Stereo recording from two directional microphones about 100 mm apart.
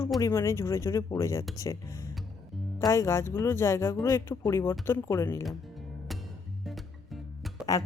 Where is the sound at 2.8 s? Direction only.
30° left (ahead or behind).